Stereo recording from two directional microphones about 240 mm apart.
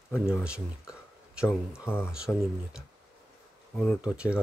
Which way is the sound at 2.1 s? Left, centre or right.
Centre.